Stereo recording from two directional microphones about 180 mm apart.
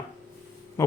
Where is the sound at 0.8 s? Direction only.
15° left (ahead or behind).